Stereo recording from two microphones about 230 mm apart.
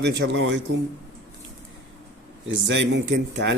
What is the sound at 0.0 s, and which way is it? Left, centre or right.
Speech, right.